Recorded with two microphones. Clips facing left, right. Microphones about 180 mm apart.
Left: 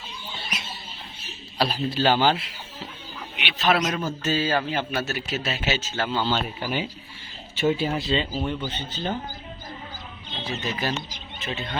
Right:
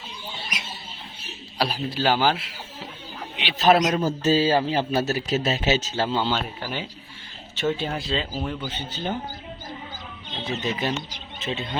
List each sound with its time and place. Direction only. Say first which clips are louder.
1.5 s a man's voice: left 2 dB; 10° right (ahead or behind)
3.3 s a man's voice: right 5 dB; 40° right (ahead or behind)
6.1 s speech: even; 25° right (ahead or behind)
6.6 s speech: left 3 dB; 10° left (ahead or behind); by 9.1 s 10° right (ahead or behind)
10.4 s speech: right 2 dB; 25° right (ahead or behind)